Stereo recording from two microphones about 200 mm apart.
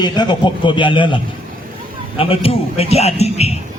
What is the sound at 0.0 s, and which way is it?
A man's voice, 20° left (ahead or behind).